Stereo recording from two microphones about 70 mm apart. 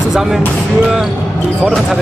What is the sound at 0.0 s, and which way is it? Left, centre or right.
Speech, centre.